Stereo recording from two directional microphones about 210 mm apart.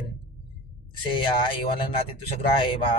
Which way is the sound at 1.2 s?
25° left (ahead or behind).